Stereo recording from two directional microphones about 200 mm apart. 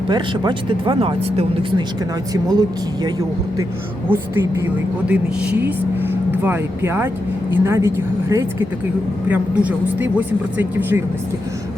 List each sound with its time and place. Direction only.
0.1 s speech: 25° right (ahead or behind)
4.1 s speech: 10° right (ahead or behind)
5.6 s speech: 10° right (ahead or behind)